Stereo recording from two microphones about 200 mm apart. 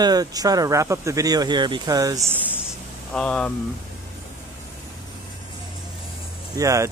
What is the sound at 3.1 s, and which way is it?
Speech, 5° left (ahead or behind).